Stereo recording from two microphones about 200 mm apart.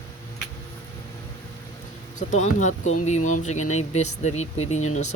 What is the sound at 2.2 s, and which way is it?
Speech, 35° left (ahead or behind).